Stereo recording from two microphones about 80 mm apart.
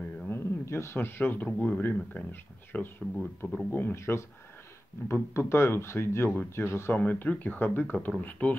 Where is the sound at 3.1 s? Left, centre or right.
Centre.